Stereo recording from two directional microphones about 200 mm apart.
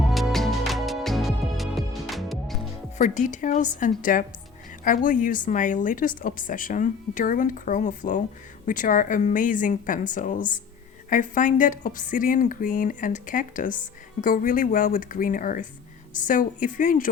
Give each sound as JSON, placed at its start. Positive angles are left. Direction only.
{"t": 0.1, "sound": "music", "side_deg": 0}
{"t": 3.0, "sound": "a woman's voice", "side_deg": 40}